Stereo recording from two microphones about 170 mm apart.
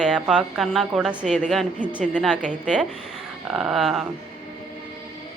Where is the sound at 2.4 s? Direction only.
45° right (ahead or behind).